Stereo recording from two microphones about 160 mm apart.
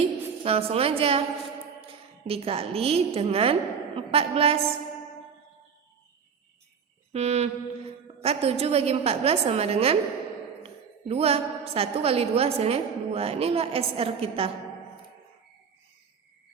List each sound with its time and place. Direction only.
0.0 s a woman's voice: 40° right (ahead or behind)
2.2 s a woman's voice: 35° right (ahead or behind)
7.1 s a woman's voice: 40° right (ahead or behind)
11.1 s a woman's voice: 40° right (ahead or behind)